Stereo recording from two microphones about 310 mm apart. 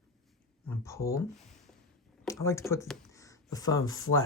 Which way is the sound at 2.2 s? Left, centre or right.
Centre.